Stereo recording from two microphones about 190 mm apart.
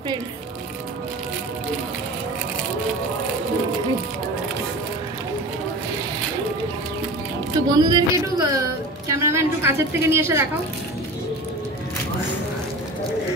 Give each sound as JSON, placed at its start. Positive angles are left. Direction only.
{"t": 7.6, "sound": "a woman's voice", "side_deg": -20}